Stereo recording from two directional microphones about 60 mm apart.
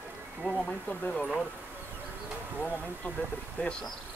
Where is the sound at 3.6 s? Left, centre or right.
Left.